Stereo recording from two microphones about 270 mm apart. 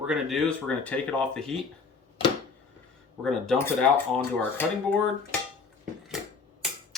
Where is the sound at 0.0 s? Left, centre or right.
Centre.